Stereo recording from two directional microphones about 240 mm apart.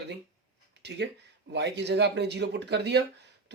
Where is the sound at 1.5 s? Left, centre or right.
Right.